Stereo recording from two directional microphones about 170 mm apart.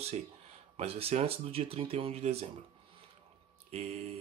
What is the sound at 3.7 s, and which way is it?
Speech, 40° right (ahead or behind).